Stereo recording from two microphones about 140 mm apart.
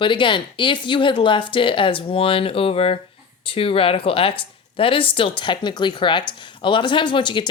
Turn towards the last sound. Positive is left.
turn(degrees=35)  # may be behind; listen again after turning